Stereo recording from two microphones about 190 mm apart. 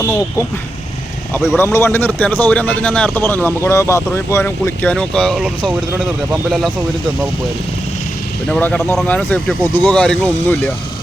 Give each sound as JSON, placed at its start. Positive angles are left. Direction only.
{"t": 0.0, "sound": "a man's voice", "side_deg": 15}
{"t": 1.5, "sound": "a man's voice", "side_deg": 10}
{"t": 8.4, "sound": "a man's voice", "side_deg": 5}